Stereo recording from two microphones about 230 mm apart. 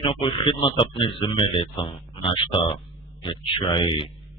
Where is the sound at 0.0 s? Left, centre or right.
Left.